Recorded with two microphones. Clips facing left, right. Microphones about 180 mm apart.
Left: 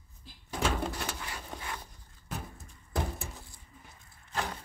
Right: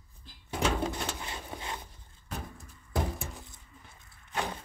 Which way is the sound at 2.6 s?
5° right (ahead or behind).